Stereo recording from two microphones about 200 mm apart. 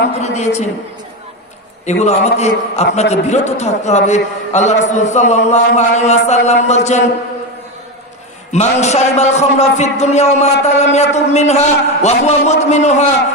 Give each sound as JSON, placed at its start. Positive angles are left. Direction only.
{"t": 0.2, "sound": "a man's voice", "side_deg": 35}
{"t": 1.9, "sound": "a man's voice", "side_deg": 35}
{"t": 8.5, "sound": "a man's voice", "side_deg": 35}